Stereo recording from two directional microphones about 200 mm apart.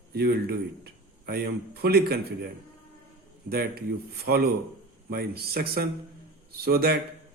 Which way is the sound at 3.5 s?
50° right (ahead or behind).